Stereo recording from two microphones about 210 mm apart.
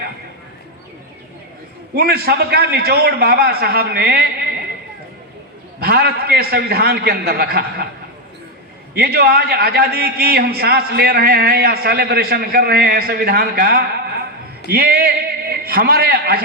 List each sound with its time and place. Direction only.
2.0 s a man's voice: 50° right (ahead or behind)
5.8 s a man's voice: 50° right (ahead or behind)
9.0 s a man's voice: 50° right (ahead or behind)